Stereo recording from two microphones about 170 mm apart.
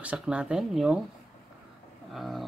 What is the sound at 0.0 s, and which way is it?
Speech, 5° right (ahead or behind).